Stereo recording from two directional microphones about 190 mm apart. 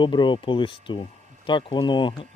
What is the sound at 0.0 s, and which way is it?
Speech, 25° left (ahead or behind).